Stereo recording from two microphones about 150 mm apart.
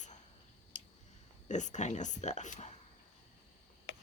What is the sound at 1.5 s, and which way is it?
Speech, 55° left (ahead or behind).